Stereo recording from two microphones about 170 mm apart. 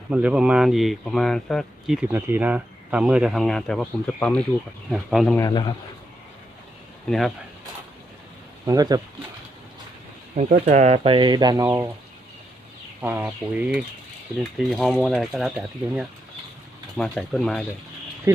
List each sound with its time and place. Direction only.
0.1 s speech: 5° right (ahead or behind)
5.4 s a man's voice: 25° left (ahead or behind)
7.1 s speech: centre (ahead or behind)
8.6 s speech: 20° right (ahead or behind)
10.3 s speech: 45° right (ahead or behind); by 11.9 s 15° right (ahead or behind)
13.0 s speech: 10° right (ahead or behind)
14.7 s speech: 5° left (ahead or behind)